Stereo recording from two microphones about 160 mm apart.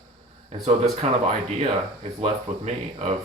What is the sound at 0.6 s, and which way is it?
Speech, 45° right (ahead or behind).